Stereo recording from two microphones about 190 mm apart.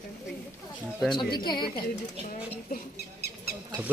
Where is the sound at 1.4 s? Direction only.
25° left (ahead or behind).